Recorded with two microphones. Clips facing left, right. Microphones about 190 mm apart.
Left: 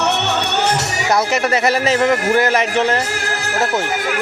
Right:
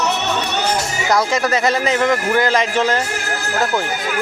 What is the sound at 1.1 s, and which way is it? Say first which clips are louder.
Speech: even; 25° left (ahead or behind).